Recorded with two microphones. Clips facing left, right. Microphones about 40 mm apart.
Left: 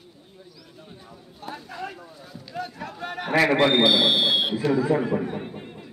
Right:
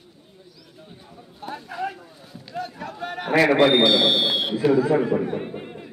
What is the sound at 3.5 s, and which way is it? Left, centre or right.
Speech, centre.